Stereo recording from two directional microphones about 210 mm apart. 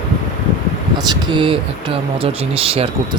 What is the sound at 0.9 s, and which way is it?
Speech, 20° right (ahead or behind).